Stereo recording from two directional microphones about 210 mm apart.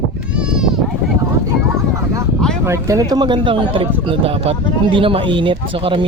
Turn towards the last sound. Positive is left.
turn(degrees=-25)  # may be behind; listen again after turning